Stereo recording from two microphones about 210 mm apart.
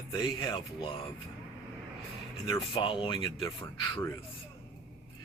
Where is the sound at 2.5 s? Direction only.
25° left (ahead or behind).